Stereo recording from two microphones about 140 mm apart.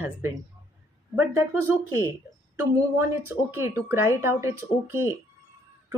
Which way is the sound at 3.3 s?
20° right (ahead or behind).